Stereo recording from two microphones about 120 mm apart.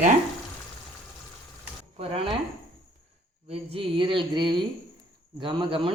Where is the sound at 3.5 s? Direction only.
55° right (ahead or behind).